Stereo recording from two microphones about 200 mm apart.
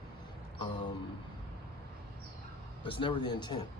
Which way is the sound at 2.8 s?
25° left (ahead or behind).